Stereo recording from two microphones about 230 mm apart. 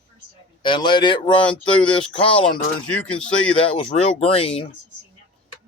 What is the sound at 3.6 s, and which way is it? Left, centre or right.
Speech, left.